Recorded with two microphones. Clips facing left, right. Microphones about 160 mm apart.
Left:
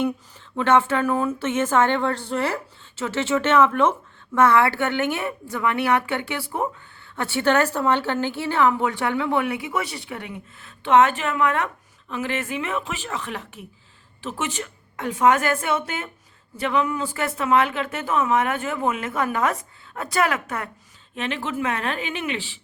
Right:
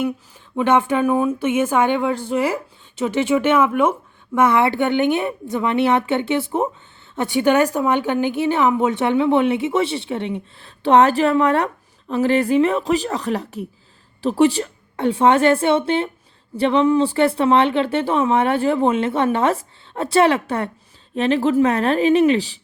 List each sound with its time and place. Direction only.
0.5 s a woman's voice: 15° right (ahead or behind); by 22.6 s 40° right (ahead or behind)